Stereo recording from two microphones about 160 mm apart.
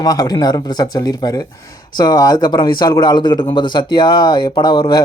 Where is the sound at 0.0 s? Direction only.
25° left (ahead or behind).